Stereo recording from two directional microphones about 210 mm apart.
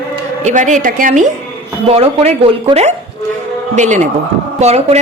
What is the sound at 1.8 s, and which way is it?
A woman's voice, 25° right (ahead or behind).